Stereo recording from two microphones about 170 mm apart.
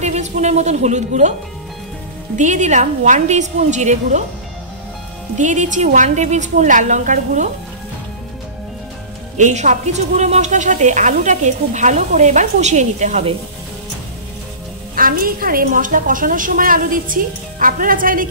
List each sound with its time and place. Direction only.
0.0 s speech: 40° right (ahead or behind)
2.3 s speech: 45° right (ahead or behind)
5.4 s speech: 45° right (ahead or behind)
9.4 s speech: 45° right (ahead or behind)
15.0 s speech: 55° right (ahead or behind)